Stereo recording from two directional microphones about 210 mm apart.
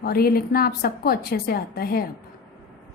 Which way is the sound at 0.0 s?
45° left (ahead or behind).